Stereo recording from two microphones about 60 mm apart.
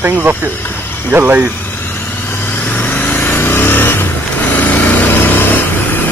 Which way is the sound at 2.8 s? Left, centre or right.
Left.